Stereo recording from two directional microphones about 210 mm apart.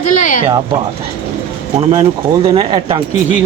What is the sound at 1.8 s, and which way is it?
Speech, 25° right (ahead or behind).